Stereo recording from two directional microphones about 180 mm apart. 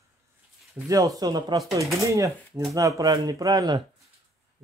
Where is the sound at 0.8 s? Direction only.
20° right (ahead or behind).